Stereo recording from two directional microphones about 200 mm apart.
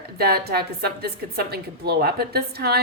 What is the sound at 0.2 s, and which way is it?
A woman's voice, 50° right (ahead or behind).